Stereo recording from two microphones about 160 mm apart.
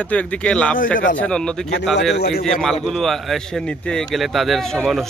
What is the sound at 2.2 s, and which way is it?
Speech, 90° left.